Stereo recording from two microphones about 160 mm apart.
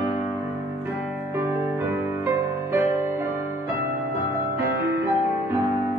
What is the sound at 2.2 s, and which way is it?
Music, 15° right (ahead or behind).